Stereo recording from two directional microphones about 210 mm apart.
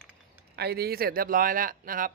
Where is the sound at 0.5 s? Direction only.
50° right (ahead or behind).